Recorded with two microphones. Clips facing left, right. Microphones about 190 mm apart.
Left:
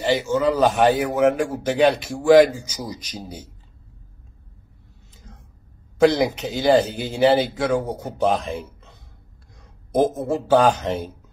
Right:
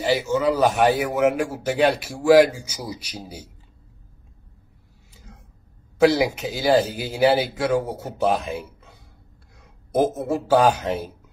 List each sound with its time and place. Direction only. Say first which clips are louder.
0.0 s a man's voice: left 1 dB; 10° right (ahead or behind)
5.1 s a sound: even; 10° right (ahead or behind)
5.9 s a man's voice: left 1 dB; 5° right (ahead or behind)
9.9 s a man's voice: left 1 dB; 5° right (ahead or behind)